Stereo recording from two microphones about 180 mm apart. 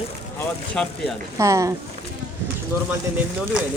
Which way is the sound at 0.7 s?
5° left (ahead or behind).